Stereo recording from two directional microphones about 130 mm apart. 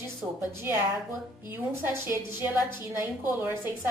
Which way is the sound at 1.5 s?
15° right (ahead or behind).